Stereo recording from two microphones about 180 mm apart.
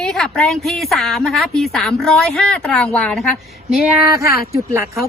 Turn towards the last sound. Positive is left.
turn(degrees=-15)  # may be behind; listen again after turning